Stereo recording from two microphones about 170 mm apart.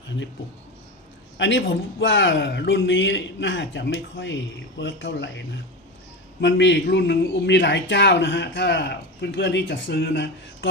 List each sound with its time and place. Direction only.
1.4 s a man's voice: 90° left